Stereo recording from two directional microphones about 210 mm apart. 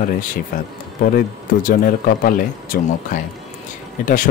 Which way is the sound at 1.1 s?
40° left (ahead or behind).